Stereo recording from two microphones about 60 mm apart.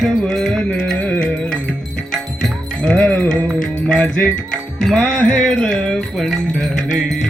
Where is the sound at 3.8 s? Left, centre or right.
Centre.